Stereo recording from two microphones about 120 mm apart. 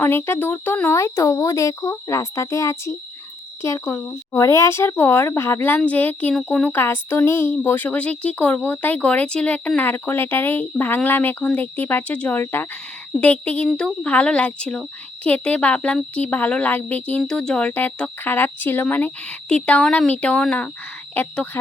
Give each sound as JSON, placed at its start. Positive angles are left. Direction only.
{"t": 0.0, "sound": "speech", "side_deg": 20}